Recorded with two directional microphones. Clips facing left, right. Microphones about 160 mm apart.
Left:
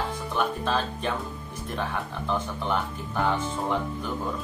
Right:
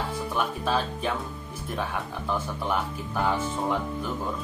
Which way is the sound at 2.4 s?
5° right (ahead or behind).